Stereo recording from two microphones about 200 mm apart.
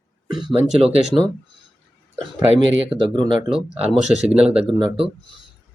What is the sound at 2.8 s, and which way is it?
Speech, 25° right (ahead or behind).